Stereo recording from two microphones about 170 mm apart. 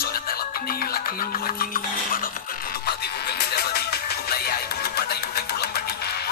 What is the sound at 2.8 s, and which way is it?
Music, 70° left (ahead or behind).